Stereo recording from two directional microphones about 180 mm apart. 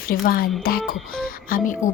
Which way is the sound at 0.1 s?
55° left (ahead or behind).